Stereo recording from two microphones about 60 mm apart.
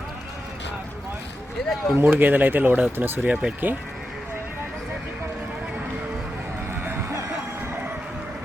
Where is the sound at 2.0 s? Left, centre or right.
Right.